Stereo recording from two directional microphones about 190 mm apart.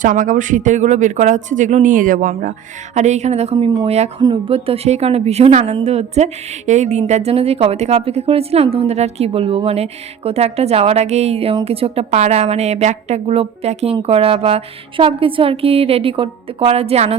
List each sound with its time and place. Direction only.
0.0 s a woman's voice: 45° right (ahead or behind)